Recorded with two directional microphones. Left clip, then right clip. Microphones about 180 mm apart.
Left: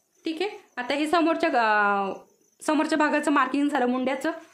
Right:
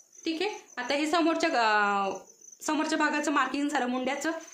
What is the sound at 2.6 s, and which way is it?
A woman's voice, 45° left (ahead or behind).